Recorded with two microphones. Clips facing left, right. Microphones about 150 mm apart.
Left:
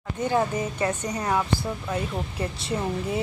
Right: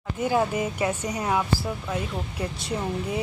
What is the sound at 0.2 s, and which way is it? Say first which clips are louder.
Speech: right 1 dB; 10° right (ahead or behind).